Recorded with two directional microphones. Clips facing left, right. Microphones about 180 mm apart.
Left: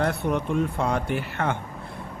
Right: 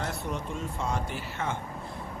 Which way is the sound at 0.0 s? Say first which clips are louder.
Left 9 dB; 60° left (ahead or behind).